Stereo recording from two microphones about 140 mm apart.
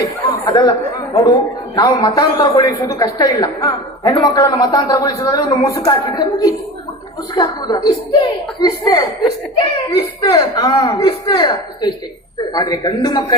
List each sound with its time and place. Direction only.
0.4 s a woman's voice: 30° left (ahead or behind)